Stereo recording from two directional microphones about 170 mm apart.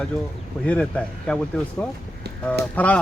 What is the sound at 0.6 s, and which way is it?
Speech, 5° left (ahead or behind).